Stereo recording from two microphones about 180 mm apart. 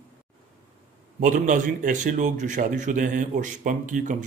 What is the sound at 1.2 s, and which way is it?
A man's voice, 45° right (ahead or behind).